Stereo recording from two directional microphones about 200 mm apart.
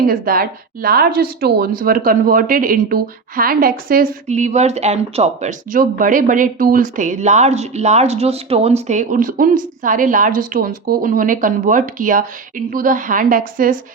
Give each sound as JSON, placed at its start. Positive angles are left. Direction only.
{"t": 0.0, "sound": "speech", "side_deg": -45}